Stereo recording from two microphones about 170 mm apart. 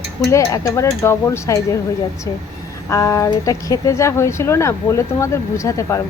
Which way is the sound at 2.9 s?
20° left (ahead or behind).